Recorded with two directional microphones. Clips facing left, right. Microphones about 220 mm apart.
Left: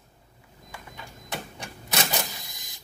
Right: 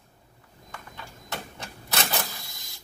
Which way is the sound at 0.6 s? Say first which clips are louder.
Even; 15° left (ahead or behind).